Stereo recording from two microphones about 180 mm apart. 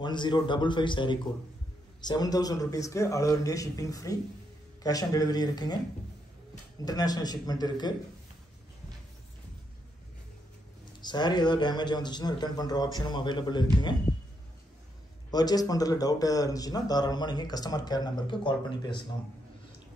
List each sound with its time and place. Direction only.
0.0 s a man's voice: 25° left (ahead or behind)
6.8 s a man's voice: 20° left (ahead or behind)
11.0 s a man's voice: 25° left (ahead or behind)
15.3 s a man's voice: 20° left (ahead or behind)